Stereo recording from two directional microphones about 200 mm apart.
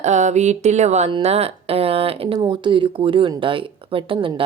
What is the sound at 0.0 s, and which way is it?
A woman's voice, 35° right (ahead or behind).